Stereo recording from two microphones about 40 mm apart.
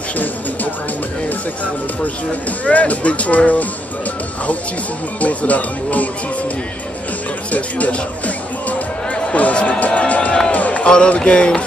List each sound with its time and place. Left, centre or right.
2.6 s speech: left
5.2 s speech: left
7.5 s speech: left
9.4 s speech: left
10.5 s run: left
10.9 s speech: left